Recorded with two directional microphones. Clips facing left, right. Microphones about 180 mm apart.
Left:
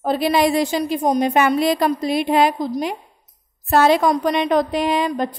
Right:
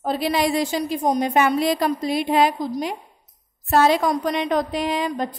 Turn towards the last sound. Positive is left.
turn(degrees=65)  # may be behind; listen again after turning